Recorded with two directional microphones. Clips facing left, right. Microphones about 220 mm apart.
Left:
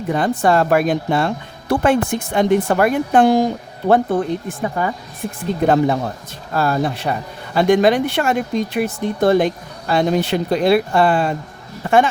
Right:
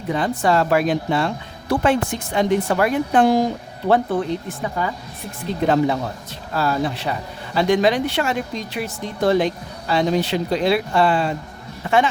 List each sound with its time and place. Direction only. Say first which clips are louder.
0.1 s a man's voice: left 3 dB; 50° left (ahead or behind)
3.8 s a man's voice: left 3 dB; 40° left (ahead or behind)